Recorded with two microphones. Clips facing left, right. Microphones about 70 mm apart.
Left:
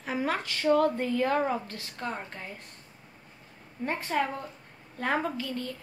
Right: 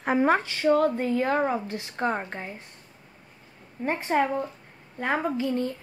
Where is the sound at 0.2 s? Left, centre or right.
Right.